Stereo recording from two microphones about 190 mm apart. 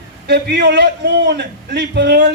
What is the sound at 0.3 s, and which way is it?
Speech, 60° right (ahead or behind).